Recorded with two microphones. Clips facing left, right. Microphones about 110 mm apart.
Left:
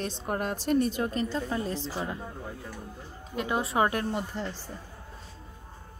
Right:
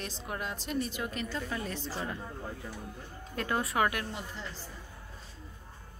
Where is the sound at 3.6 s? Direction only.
30° left (ahead or behind).